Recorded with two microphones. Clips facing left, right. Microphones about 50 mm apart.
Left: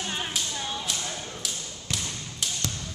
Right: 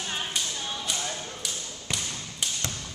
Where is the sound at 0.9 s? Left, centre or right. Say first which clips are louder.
Right 1 dB; centre.